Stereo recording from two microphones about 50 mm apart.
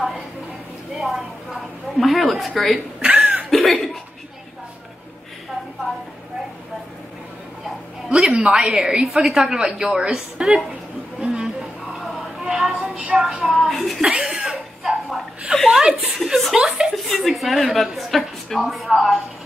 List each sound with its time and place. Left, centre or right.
0.9 s a woman's voice: centre
3.0 s cough: right
3.4 s speech: centre
8.1 s a woman's voice: centre
11.4 s a sound: centre
12.9 s speech: centre
13.2 s a woman's voice: centre
14.1 s chuckle: centre
15.5 s a woman's voice: centre